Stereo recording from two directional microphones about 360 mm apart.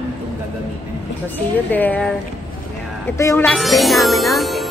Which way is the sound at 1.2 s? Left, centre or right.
Centre.